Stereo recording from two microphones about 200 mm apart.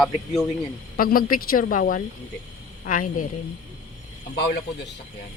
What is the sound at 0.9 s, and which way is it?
Speech, 45° left (ahead or behind).